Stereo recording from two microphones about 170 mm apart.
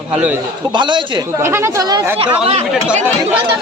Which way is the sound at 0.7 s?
25° right (ahead or behind).